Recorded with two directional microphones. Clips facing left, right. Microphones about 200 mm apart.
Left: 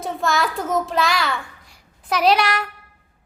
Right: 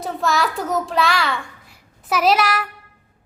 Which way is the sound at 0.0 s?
Centre (ahead or behind).